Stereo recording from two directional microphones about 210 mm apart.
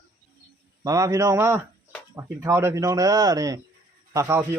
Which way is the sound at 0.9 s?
15° right (ahead or behind).